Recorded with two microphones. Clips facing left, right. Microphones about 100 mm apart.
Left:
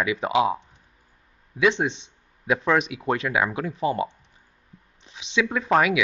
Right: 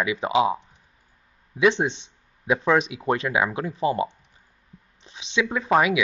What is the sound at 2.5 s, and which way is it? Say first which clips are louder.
Speech: right 1 dB; 5° right (ahead or behind).